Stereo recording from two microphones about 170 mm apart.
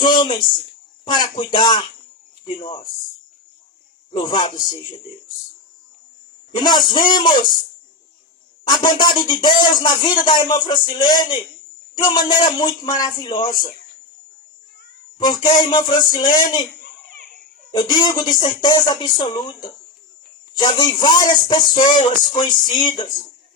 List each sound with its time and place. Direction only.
0.0 s speech: 30° left (ahead or behind)
4.2 s speech: 25° left (ahead or behind)
6.6 s speech: 25° left (ahead or behind)
8.6 s speech: 25° left (ahead or behind)
15.2 s speech: 25° left (ahead or behind)
17.7 s speech: 25° left (ahead or behind)